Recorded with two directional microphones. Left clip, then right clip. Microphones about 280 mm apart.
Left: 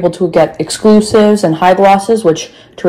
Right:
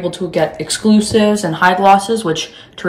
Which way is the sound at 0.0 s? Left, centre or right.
Centre.